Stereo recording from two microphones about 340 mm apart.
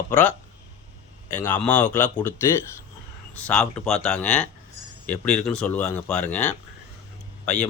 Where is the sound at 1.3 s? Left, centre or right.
Centre.